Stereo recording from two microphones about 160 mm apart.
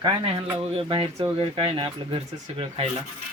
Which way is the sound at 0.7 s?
35° right (ahead or behind).